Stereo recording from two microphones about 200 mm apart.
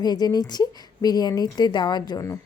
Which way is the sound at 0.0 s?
20° left (ahead or behind).